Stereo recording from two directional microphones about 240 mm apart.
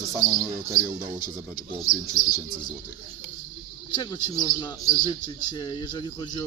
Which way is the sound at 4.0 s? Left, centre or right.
Centre.